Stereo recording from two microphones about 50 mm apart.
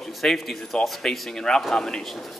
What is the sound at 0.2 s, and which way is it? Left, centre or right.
Speech, centre.